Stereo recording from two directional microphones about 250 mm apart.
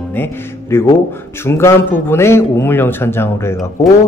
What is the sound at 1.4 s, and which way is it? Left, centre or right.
Speech, centre.